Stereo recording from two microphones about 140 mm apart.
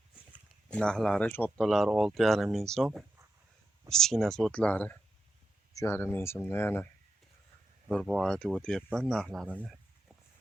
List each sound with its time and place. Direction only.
0.7 s speech: 5° left (ahead or behind)
1.6 s speech: centre (ahead or behind)
7.9 s speech: centre (ahead or behind)
9.5 s a sound: 5° right (ahead or behind)